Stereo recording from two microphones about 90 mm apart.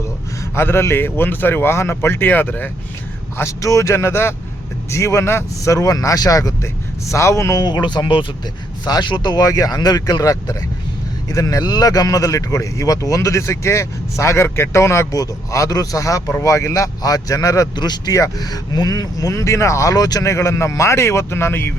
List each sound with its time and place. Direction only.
0.5 s speech: 25° left (ahead or behind)
3.3 s speech: 35° left (ahead or behind)
7.6 s speech: 55° left (ahead or behind)
9.5 s speech: 45° left (ahead or behind); by 21.7 s 25° left (ahead or behind)